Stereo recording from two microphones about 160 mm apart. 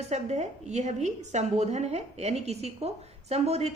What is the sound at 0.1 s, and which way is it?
A woman's voice, 45° right (ahead or behind).